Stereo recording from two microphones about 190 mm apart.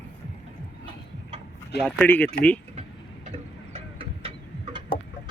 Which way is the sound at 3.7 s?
30° right (ahead or behind).